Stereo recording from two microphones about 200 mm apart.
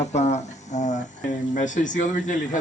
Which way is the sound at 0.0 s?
35° left (ahead or behind).